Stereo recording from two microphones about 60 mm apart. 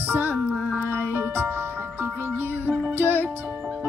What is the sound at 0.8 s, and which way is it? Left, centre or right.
Music, right.